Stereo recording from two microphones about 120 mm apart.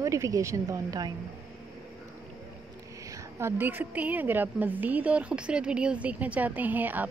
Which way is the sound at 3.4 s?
20° right (ahead or behind).